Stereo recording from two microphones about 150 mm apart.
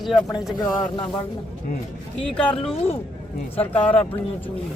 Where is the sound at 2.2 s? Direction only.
5° left (ahead or behind).